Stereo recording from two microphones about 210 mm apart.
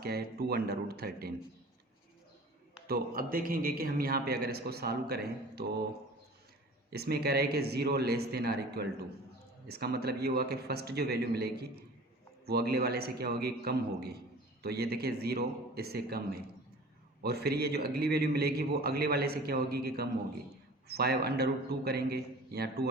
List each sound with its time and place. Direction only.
0.0 s a man's voice: 45° right (ahead or behind)
2.8 s a man's voice: 45° right (ahead or behind)
6.9 s a man's voice: 50° right (ahead or behind)